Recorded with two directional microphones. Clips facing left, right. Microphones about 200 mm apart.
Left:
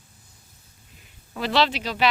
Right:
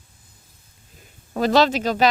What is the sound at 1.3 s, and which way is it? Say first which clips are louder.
Speech: right 6 dB; 45° right (ahead or behind).